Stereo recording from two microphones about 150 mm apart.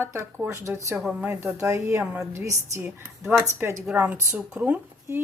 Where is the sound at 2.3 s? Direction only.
20° right (ahead or behind).